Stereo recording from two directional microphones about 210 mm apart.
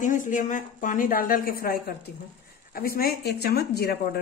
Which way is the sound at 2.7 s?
45° left (ahead or behind).